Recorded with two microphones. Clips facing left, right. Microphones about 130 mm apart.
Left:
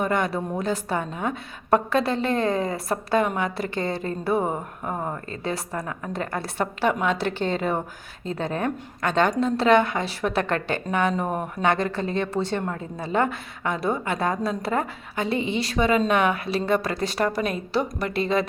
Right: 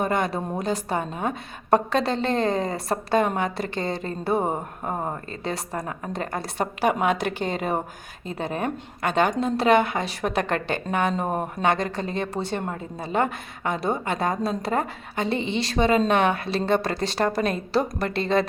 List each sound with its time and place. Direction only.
0.1 s a woman's voice: 20° right (ahead or behind)
6.6 s a woman's voice: 15° right (ahead or behind)
11.6 s a woman's voice: 15° right (ahead or behind)